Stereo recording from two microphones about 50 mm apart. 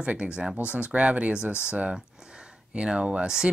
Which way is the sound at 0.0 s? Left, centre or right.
Right.